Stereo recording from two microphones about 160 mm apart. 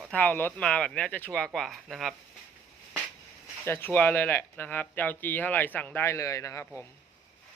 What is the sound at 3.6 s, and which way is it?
Speech, 15° left (ahead or behind).